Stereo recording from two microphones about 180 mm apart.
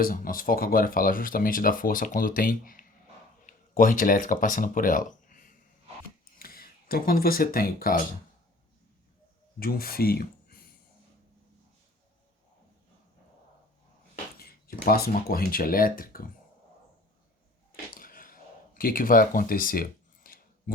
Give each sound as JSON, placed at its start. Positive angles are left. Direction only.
{"t": 0.0, "sound": "speech", "side_deg": 50}
{"t": 9.6, "sound": "speech", "side_deg": 55}
{"t": 14.3, "sound": "speech", "side_deg": 60}
{"t": 17.9, "sound": "a sound", "side_deg": 50}